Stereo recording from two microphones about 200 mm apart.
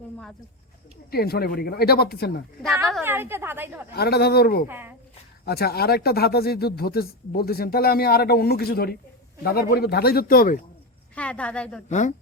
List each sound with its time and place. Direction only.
1.1 s speech: 50° left (ahead or behind)
3.0 s a woman's voice: 10° right (ahead or behind)
3.9 s speech: 50° left (ahead or behind)
4.7 s a woman's voice: 10° right (ahead or behind)
5.5 s speech: 50° left (ahead or behind)
11.1 s a woman's voice: 5° left (ahead or behind)
11.9 s speech: 35° left (ahead or behind)